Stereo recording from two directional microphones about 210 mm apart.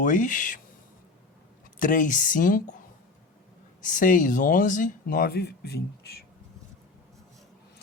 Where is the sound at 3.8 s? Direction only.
40° left (ahead or behind).